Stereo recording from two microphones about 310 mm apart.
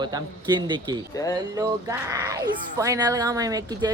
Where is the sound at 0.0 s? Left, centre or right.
Centre.